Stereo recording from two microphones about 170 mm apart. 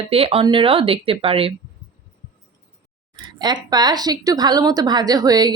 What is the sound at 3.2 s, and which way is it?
A woman's voice, 25° right (ahead or behind).